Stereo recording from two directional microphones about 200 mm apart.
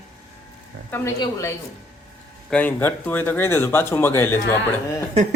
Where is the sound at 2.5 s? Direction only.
10° left (ahead or behind).